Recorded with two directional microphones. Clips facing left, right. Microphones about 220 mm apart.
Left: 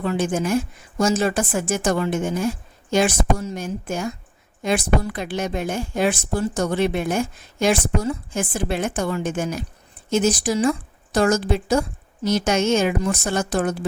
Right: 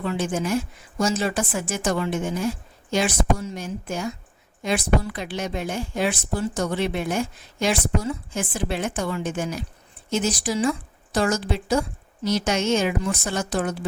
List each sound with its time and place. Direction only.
0.0 s a woman's voice: 45° left (ahead or behind)